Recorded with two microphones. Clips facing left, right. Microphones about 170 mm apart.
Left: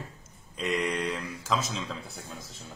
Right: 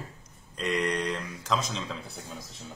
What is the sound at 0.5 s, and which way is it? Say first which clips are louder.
Speech: right 1 dB; centre (ahead or behind).